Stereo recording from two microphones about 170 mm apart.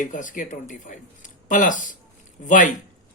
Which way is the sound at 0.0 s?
50° left (ahead or behind).